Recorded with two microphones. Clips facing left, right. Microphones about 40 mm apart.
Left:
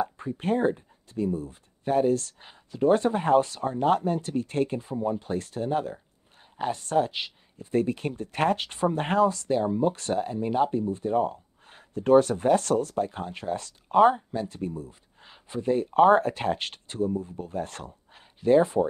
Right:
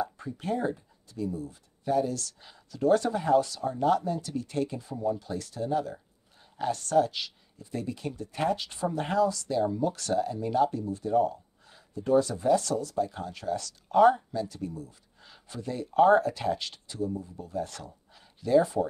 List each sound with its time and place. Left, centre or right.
0.0 s speech: left
6.5 s speech: left
7.7 s speech: left
14.3 s speech: left